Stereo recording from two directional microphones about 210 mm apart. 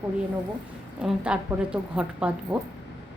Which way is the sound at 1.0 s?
5° right (ahead or behind).